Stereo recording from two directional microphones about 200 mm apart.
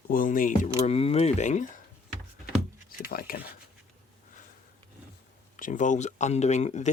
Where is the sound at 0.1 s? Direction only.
45° left (ahead or behind).